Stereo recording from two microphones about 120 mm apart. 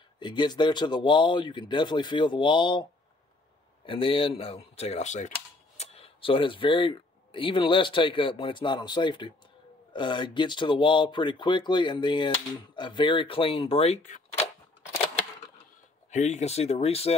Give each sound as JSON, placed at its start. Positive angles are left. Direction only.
{"t": 0.2, "sound": "speech", "side_deg": 40}
{"t": 5.8, "sound": "speech", "side_deg": 55}
{"t": 16.1, "sound": "speech", "side_deg": 75}